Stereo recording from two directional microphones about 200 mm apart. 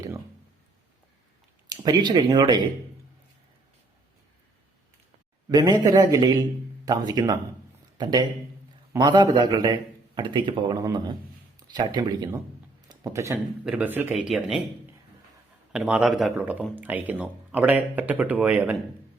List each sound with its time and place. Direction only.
1.7 s speech: 20° right (ahead or behind)
5.5 s speech: 20° right (ahead or behind); by 14.6 s centre (ahead or behind)
15.7 s speech: 5° right (ahead or behind)